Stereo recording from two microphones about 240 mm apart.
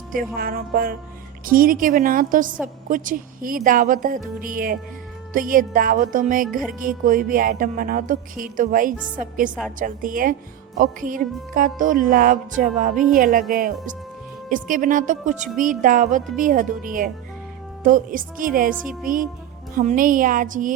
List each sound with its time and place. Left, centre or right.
0.3 s music: right